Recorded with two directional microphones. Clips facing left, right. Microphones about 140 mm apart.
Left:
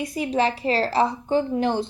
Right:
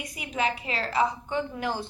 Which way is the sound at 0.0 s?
35° left (ahead or behind).